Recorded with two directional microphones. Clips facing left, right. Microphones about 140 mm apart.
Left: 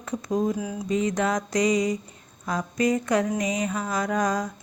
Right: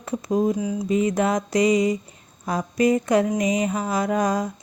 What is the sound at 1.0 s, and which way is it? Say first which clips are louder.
Speech: right 3 dB; 25° right (ahead or behind).